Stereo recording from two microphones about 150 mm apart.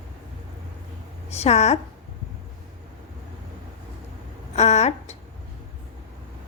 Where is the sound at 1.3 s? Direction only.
45° left (ahead or behind).